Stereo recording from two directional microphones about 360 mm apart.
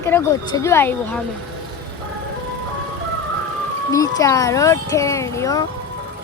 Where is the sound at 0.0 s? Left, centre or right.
Centre.